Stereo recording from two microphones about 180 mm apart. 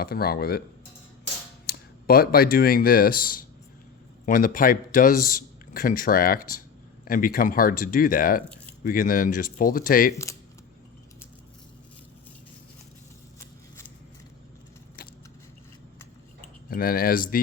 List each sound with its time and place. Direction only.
0.0 s speech: 55° left (ahead or behind)
1.6 s a man's voice: 60° left (ahead or behind)
16.6 s speech: 55° left (ahead or behind)